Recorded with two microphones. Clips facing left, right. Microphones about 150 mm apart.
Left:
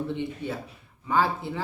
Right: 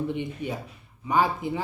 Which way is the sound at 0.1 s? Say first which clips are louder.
Even; 15° right (ahead or behind).